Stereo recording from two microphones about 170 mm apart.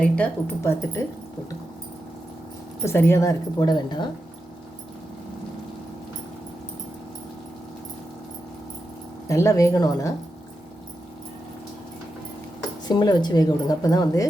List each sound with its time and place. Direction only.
0.0 s speech: 10° left (ahead or behind)
2.8 s speech: 15° left (ahead or behind)
9.3 s speech: 15° left (ahead or behind)
12.9 s speech: 25° left (ahead or behind)